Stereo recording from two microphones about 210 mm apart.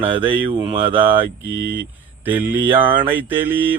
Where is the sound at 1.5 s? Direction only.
65° left (ahead or behind).